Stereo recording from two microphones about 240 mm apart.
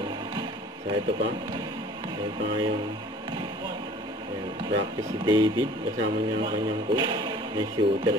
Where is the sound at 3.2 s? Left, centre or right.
Centre.